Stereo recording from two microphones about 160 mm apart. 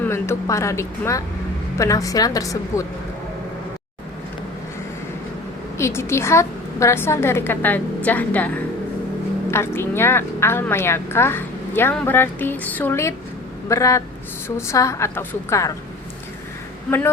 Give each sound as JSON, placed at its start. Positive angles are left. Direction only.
{"t": 0.0, "sound": "a woman's voice", "side_deg": 15}
{"t": 5.7, "sound": "a woman's voice", "side_deg": 15}